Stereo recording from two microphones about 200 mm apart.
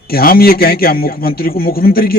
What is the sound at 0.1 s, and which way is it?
A man's voice, 50° left (ahead or behind).